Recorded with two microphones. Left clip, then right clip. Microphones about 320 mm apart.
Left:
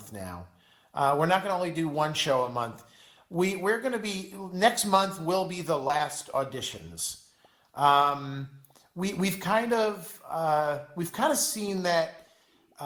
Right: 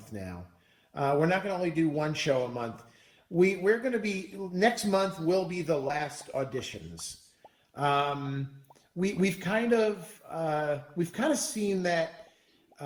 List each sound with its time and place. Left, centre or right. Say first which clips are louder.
0.1 s speech: left 2 dB; centre